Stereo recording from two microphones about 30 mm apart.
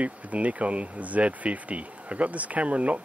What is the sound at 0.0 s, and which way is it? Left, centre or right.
Speech, right.